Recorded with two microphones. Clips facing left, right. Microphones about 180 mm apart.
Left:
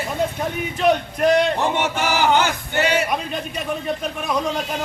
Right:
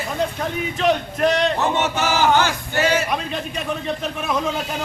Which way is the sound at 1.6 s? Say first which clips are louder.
Even; 10° left (ahead or behind).